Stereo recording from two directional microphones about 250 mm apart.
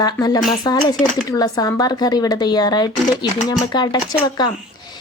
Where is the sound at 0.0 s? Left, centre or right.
Centre.